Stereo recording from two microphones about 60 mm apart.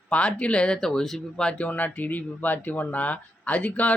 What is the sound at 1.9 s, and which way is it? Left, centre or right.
Speech, left.